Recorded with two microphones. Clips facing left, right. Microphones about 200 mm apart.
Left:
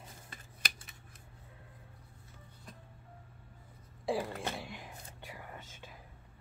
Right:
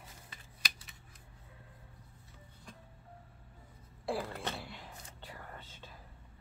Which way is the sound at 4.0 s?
15° left (ahead or behind).